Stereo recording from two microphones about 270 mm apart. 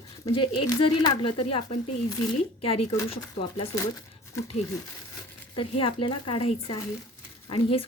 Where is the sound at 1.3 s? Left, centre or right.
Left.